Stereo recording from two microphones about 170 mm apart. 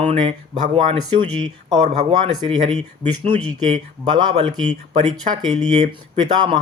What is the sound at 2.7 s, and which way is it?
Speech, 40° right (ahead or behind).